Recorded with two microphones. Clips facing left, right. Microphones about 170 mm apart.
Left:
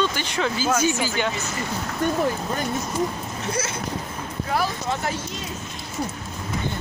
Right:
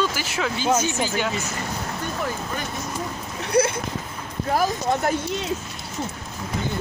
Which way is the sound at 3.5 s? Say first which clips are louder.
Right 11 dB; 65° right (ahead or behind).